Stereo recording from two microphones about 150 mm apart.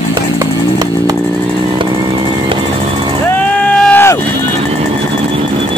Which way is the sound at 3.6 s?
10° left (ahead or behind).